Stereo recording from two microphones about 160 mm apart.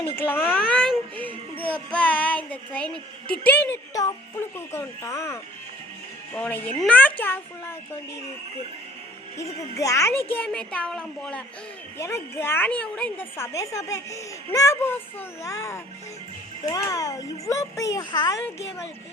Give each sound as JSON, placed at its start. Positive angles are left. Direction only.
{"t": 0.2, "sound": "a woman's voice", "side_deg": 10}
{"t": 9.4, "sound": "a woman's voice", "side_deg": 20}
{"t": 11.9, "sound": "a woman's voice", "side_deg": 15}